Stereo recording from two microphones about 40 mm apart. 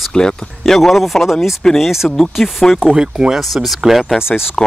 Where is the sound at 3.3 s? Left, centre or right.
Centre.